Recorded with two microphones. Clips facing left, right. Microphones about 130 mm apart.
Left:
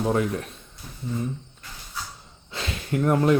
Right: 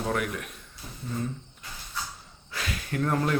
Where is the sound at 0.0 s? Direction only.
25° left (ahead or behind).